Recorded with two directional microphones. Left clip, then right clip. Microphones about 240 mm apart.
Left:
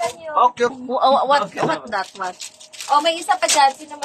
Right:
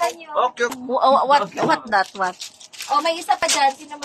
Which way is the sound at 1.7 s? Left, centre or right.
Right.